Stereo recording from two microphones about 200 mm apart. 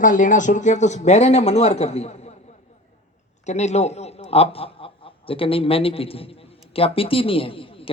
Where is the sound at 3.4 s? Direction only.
35° left (ahead or behind).